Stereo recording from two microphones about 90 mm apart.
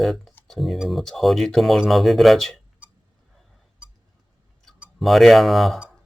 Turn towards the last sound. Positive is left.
turn(degrees=0)  # may be behind; listen again after turning